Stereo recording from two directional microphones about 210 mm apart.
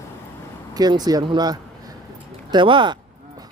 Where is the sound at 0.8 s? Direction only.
20° right (ahead or behind).